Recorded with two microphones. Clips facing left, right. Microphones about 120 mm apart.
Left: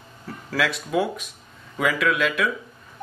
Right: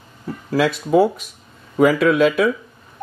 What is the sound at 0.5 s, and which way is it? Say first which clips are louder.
Speech: right 7 dB; 25° right (ahead or behind).